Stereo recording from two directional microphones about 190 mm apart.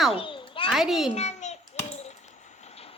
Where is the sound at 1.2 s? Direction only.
35° left (ahead or behind).